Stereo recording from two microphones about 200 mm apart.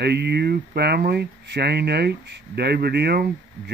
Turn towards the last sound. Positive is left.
turn(degrees=-55)  # may be behind; listen again after turning